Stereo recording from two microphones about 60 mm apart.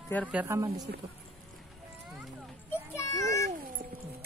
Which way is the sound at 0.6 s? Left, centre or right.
Right.